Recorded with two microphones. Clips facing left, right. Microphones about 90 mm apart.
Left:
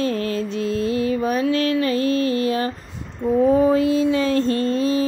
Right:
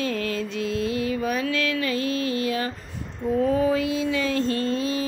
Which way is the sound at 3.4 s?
35° left (ahead or behind).